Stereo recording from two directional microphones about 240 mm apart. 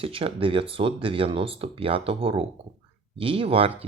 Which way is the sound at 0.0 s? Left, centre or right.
Right.